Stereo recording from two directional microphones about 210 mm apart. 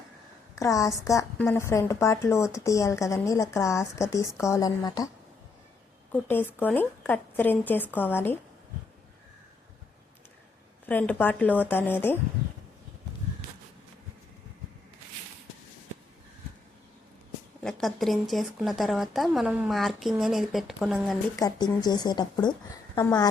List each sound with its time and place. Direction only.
0.5 s speech: 15° left (ahead or behind)
6.1 s speech: 10° left (ahead or behind)
10.8 s speech: 5° left (ahead or behind)
17.6 s a woman's voice: centre (ahead or behind)
21.3 s speech: 20° left (ahead or behind)